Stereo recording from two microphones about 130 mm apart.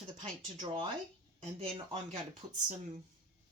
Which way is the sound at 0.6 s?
45° right (ahead or behind).